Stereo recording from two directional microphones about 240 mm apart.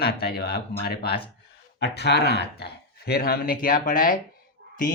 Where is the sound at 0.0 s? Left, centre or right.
Left.